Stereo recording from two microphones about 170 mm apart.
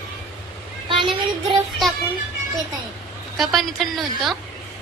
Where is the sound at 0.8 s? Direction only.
30° right (ahead or behind).